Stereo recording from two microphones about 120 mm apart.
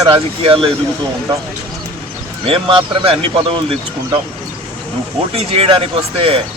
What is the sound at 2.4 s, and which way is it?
Speech, 50° right (ahead or behind).